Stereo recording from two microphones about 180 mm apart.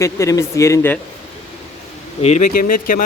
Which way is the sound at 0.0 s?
15° left (ahead or behind).